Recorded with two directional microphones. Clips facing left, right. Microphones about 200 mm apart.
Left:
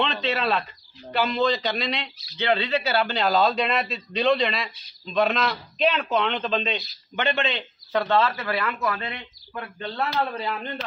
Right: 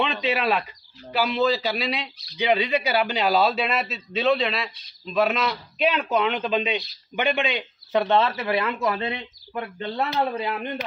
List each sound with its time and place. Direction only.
0.0 s a man's voice: 10° right (ahead or behind)